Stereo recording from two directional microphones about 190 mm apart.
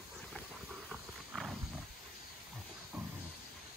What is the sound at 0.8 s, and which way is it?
Wild animals, 5° right (ahead or behind).